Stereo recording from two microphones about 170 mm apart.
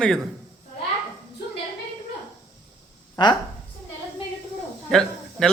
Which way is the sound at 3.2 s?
25° left (ahead or behind).